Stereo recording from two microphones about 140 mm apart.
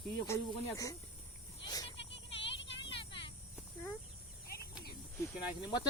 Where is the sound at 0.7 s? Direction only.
25° left (ahead or behind).